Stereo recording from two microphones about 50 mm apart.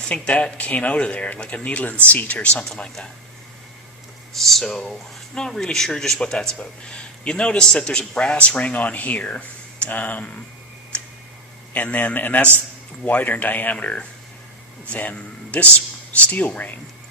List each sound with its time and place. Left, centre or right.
0.0 s speech: left
4.4 s speech: centre; by 10.2 s left
11.7 s speech: left